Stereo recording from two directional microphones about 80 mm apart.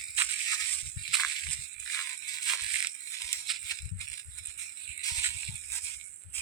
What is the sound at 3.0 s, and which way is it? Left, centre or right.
Music, left.